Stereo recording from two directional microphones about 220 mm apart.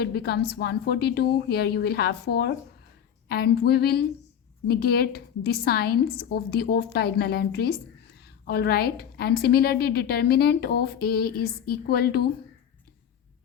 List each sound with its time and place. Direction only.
0.0 s a woman's voice: 45° left (ahead or behind)